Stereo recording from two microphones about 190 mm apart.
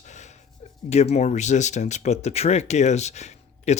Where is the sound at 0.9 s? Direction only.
35° left (ahead or behind).